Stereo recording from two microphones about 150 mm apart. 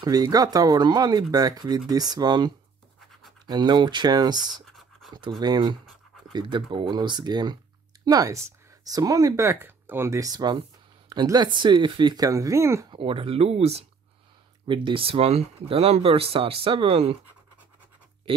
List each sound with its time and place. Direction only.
0.0 s speech: 25° right (ahead or behind)
4.6 s scratch: centre (ahead or behind)
5.4 s speech: 30° right (ahead or behind)
12.9 s speech: 35° right (ahead or behind)